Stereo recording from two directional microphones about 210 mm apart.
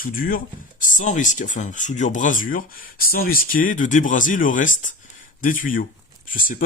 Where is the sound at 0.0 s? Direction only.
40° left (ahead or behind).